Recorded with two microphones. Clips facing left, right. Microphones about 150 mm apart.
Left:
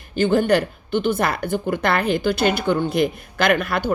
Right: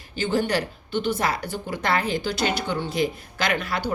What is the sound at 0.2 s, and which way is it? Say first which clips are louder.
Speech: left 6 dB; 55° left (ahead or behind).